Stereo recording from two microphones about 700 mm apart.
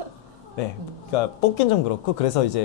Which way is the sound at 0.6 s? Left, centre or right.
Left.